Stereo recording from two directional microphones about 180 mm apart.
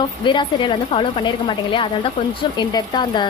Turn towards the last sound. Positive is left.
turn(degrees=25)  # may be behind; listen again after turning